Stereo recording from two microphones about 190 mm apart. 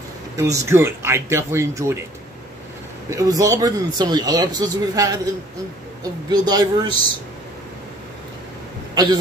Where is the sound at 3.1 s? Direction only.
15° right (ahead or behind).